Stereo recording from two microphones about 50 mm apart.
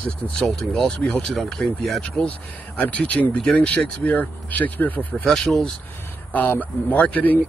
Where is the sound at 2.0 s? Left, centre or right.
Left.